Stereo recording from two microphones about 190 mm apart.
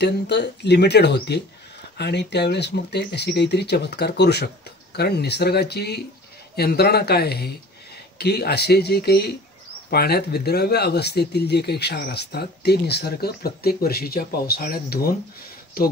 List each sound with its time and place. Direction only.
0.0 s speech: 60° left (ahead or behind)